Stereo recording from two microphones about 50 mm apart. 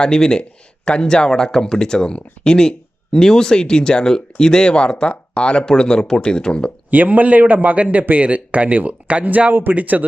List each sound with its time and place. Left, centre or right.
0.0 s speech: centre
6.9 s speech: right